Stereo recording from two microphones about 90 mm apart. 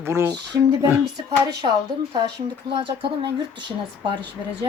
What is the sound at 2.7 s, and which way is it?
Speech, 75° right (ahead or behind).